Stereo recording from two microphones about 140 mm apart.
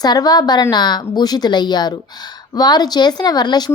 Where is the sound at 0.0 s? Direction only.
30° left (ahead or behind).